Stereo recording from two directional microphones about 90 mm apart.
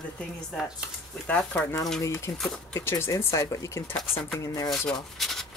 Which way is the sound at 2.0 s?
30° left (ahead or behind).